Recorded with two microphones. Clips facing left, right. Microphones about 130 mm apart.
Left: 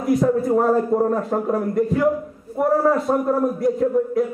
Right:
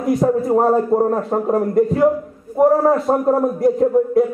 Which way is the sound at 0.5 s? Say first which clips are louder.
Right 3 dB; 30° right (ahead or behind).